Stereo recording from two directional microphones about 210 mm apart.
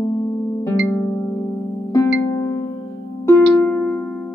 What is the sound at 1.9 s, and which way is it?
Music, 20° left (ahead or behind).